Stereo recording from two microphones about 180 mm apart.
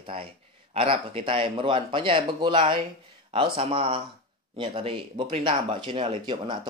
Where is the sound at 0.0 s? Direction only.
30° right (ahead or behind).